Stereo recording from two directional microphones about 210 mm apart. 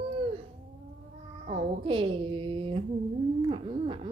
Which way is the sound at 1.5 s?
25° right (ahead or behind).